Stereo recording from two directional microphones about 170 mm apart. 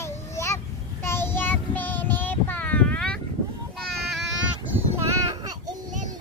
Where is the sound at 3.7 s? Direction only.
5° left (ahead or behind).